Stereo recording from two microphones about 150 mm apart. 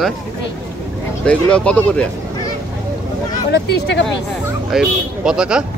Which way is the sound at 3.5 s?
90° left.